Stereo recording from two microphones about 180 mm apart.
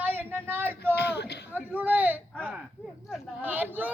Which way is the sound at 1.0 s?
65° left (ahead or behind).